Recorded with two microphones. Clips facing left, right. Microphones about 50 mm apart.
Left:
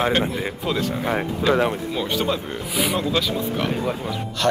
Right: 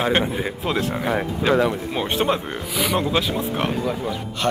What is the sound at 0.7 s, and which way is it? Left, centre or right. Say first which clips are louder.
Speech: right 1 dB; right.